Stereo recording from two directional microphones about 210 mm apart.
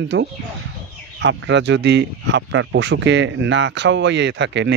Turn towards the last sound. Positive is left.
turn(degrees=-55)  # may be behind; listen again after turning